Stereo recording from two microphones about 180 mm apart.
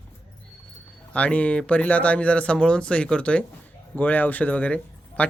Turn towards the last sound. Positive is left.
turn(degrees=5)  # may be behind; listen again after turning